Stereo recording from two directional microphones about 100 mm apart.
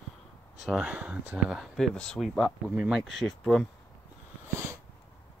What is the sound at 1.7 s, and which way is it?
Speech, 5° left (ahead or behind).